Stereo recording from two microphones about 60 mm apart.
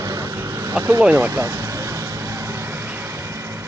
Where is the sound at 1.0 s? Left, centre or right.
Right.